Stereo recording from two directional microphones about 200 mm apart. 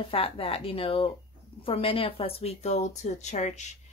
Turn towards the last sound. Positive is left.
turn(degrees=35)  # may be behind; listen again after turning